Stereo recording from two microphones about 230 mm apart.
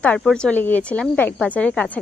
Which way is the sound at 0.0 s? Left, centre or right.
Centre.